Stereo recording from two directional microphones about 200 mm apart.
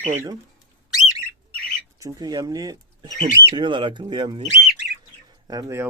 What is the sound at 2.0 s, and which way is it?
Speech, 20° right (ahead or behind).